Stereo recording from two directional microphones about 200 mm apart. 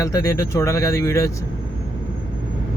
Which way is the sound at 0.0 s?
15° left (ahead or behind).